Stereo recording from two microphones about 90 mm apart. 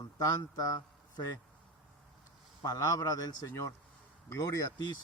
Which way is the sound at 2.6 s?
40° left (ahead or behind).